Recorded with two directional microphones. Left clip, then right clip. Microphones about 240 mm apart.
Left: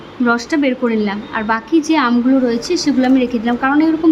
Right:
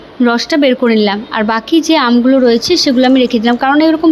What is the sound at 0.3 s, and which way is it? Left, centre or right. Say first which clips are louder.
A woman's voice: right 5 dB; centre.